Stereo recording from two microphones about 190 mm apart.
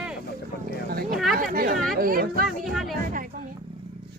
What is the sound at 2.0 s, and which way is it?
Speech, 50° right (ahead or behind).